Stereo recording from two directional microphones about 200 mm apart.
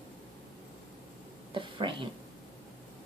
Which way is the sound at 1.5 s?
25° right (ahead or behind).